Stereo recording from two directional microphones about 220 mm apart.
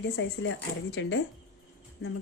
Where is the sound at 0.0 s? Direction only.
60° left (ahead or behind).